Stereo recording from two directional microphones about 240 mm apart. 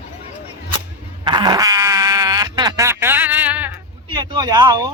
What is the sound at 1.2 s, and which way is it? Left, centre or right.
Fart, centre.